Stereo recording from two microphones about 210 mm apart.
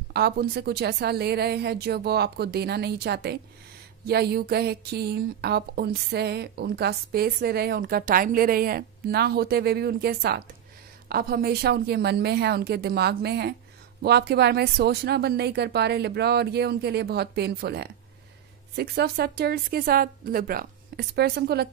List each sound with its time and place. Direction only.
0.1 s speech: 50° right (ahead or behind)